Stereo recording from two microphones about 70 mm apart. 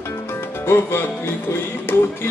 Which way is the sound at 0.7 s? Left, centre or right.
Left.